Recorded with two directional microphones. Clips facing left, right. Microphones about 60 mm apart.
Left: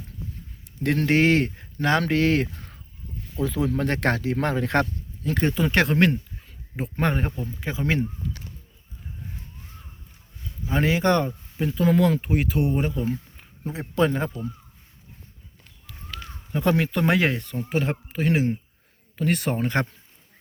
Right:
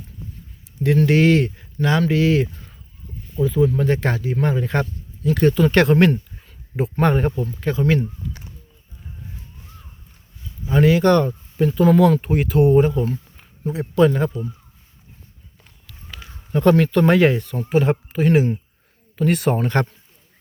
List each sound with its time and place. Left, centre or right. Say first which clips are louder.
0.8 s speech: right 6 dB; left
1.1 s speech: right 1 dB; left
3.2 s speech: right 7 dB; left
5.2 s speech: right 6 dB; left
5.5 s speech: right 8 dB; centre
5.7 s speech: right 5 dB; centre
7.6 s speech: right 6 dB; centre
10.7 s speech: right 6 dB; left
11.5 s speech: right 6 dB; centre
13.7 s speech: right 6 dB; left
16.0 s a sound: left 1 dB; centre
16.6 s speech: right 7 dB; centre